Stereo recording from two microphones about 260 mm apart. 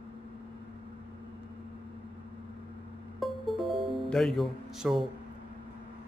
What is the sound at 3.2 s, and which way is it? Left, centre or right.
Music, centre.